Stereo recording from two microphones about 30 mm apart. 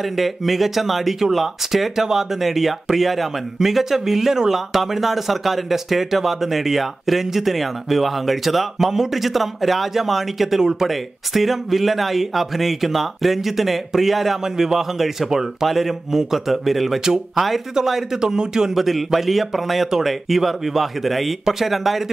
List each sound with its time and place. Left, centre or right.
0.0 s speech: centre
8.7 s speech: centre
10.6 s speech: centre
10.9 s speech: centre
18.2 s speech: right
18.8 s speech: centre